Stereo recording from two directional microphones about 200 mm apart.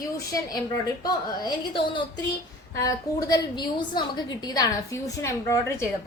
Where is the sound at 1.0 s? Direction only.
20° left (ahead or behind).